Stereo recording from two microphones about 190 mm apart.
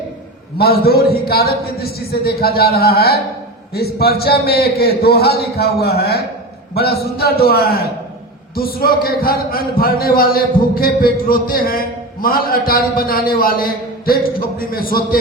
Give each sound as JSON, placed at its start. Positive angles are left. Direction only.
{"t": 0.6, "sound": "a man's voice", "side_deg": 55}